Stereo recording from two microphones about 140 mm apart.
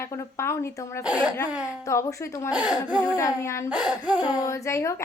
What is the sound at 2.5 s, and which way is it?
Speech, 10° right (ahead or behind).